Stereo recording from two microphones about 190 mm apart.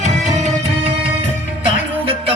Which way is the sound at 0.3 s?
40° right (ahead or behind).